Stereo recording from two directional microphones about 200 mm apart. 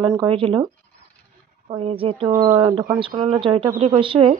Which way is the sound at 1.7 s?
30° right (ahead or behind).